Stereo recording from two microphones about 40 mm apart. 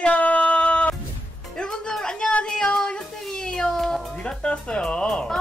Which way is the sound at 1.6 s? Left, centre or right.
Centre.